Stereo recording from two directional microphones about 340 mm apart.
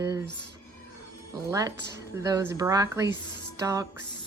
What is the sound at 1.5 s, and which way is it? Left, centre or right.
Speech, centre.